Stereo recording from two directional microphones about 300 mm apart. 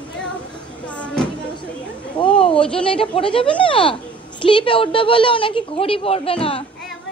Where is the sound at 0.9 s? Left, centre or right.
Centre.